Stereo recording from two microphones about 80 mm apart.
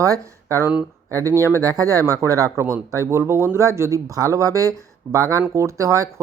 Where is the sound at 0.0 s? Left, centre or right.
Right.